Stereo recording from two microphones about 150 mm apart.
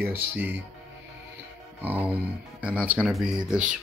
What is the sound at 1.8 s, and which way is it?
A man's voice, 10° right (ahead or behind).